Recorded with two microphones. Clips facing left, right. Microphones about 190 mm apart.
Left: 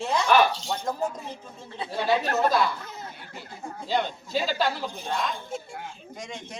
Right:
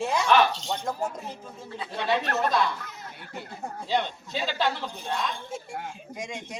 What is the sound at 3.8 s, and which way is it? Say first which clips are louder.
Speech: left 1 dB; centre (ahead or behind).